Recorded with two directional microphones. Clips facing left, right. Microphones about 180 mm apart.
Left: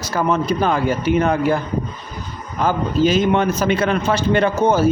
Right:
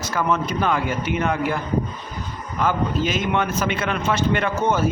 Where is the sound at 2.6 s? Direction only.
35° left (ahead or behind).